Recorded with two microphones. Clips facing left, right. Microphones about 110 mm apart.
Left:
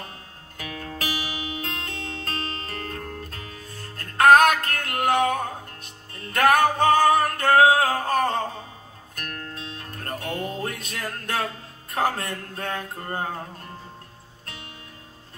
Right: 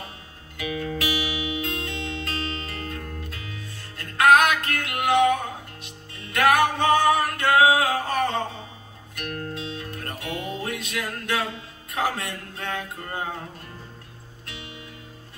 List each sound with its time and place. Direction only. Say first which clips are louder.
0.6 s music: right 5 dB; 45° left (ahead or behind)
14.4 s music: right 1 dB; 45° left (ahead or behind)